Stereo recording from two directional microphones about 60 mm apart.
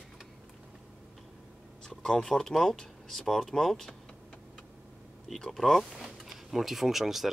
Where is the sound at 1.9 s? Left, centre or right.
Centre.